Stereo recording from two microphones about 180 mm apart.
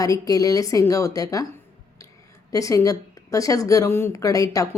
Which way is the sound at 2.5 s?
15° left (ahead or behind).